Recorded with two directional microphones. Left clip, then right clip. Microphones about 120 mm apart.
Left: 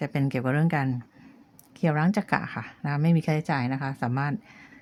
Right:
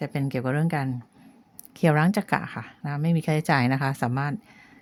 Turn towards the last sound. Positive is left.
turn(degrees=-5)  # may be behind; listen again after turning